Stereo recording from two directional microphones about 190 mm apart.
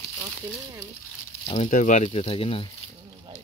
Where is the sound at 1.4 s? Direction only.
30° left (ahead or behind).